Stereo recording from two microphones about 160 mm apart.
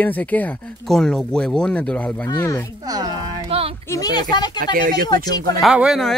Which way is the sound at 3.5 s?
40° right (ahead or behind).